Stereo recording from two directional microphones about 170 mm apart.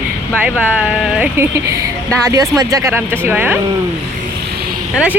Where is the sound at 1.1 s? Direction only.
10° right (ahead or behind).